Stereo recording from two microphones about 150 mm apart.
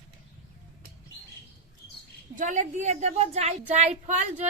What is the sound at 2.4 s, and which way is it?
A woman's voice, 55° right (ahead or behind).